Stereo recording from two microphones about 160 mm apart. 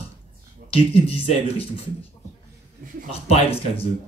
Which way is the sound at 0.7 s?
35° left (ahead or behind).